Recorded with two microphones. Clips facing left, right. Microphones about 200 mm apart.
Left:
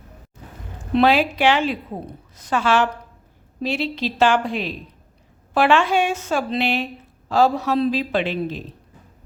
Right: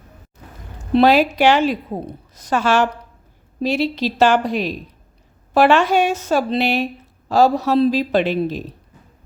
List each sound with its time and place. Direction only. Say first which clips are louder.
0.8 s a woman's voice: right 3 dB; 40° right (ahead or behind)